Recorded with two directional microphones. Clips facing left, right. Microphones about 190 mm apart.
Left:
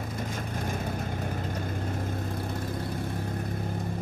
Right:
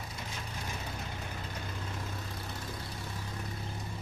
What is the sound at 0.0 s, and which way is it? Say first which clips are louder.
Vehicle: left 9 dB; 50° left (ahead or behind).